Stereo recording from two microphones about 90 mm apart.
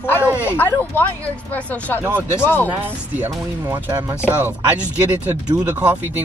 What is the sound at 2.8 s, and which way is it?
Speech, 25° right (ahead or behind).